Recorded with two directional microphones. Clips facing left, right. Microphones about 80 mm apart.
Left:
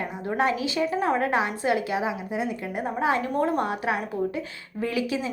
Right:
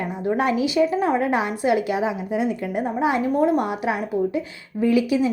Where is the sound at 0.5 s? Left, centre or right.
Centre.